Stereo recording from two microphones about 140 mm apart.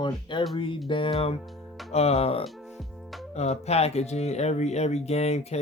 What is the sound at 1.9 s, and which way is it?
Speech, 50° left (ahead or behind).